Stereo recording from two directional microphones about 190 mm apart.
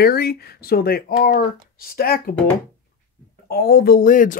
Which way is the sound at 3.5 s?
55° left (ahead or behind).